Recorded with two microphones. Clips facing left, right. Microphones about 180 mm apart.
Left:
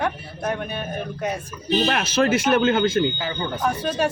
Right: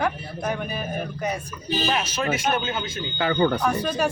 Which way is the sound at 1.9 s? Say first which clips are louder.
Left 5 dB; 75° left (ahead or behind).